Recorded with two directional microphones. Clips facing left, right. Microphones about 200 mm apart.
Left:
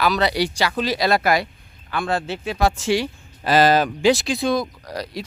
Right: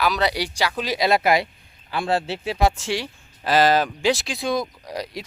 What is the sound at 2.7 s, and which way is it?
Speech, centre (ahead or behind).